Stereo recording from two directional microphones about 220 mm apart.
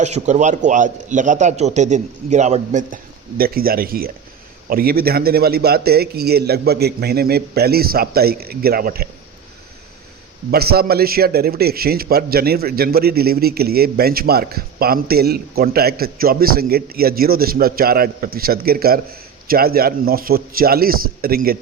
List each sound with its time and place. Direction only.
0.0 s a man's voice: 30° right (ahead or behind)
10.5 s a man's voice: 45° right (ahead or behind)